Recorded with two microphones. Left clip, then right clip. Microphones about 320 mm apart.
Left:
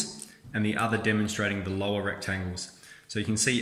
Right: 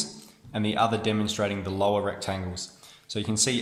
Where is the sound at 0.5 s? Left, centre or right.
Centre.